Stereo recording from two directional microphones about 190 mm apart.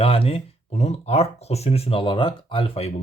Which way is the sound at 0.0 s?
30° left (ahead or behind).